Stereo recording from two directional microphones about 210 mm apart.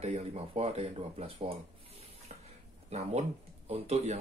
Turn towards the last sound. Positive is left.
turn(degrees=-30)  # may be behind; listen again after turning